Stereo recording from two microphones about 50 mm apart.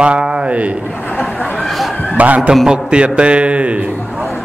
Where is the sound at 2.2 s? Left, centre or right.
Right.